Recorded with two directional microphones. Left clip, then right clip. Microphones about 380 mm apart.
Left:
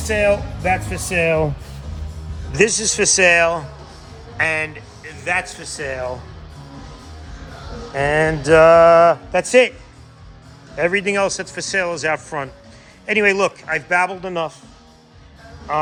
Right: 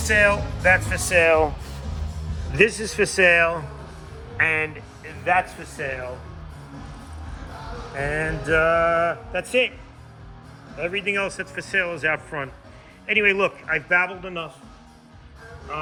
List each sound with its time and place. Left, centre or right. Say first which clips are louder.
0.0 s a man's voice: left 1 dB; centre
8.4 s a man's voice: left 10 dB; centre
9.5 s speech: left 8 dB; left
10.8 s speech: left 8 dB; left
11.1 s a man's voice: left 6 dB; centre